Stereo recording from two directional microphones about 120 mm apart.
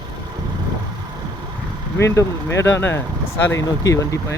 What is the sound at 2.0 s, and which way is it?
Speech, 25° left (ahead or behind).